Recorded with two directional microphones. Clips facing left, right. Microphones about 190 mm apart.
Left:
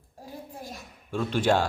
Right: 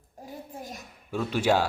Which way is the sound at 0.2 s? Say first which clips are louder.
Right 1 dB; 20° right (ahead or behind).